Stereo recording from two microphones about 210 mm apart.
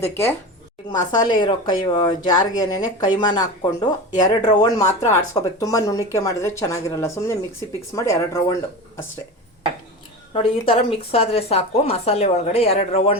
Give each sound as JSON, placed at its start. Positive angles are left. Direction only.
{"t": 0.0, "sound": "speech", "side_deg": 10}
{"t": 10.3, "sound": "speech", "side_deg": 25}